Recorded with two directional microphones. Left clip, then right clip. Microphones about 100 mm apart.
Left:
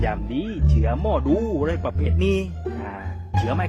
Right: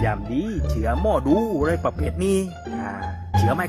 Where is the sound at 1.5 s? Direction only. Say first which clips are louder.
Right 2 dB; 20° left (ahead or behind).